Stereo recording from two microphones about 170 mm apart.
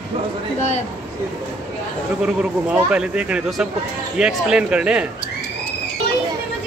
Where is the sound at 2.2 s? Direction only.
5° right (ahead or behind).